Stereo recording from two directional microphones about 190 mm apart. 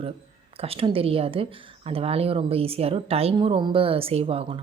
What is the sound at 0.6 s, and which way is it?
A woman's voice, 30° right (ahead or behind).